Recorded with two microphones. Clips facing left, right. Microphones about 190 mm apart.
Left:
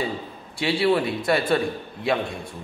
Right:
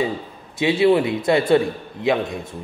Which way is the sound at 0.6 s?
20° right (ahead or behind).